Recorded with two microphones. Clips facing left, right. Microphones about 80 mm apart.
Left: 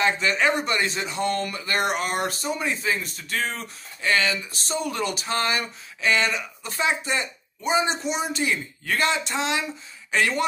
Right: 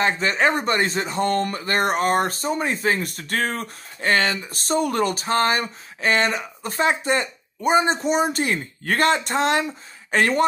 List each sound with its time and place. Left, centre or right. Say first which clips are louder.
0.0 s speech: right 2 dB; right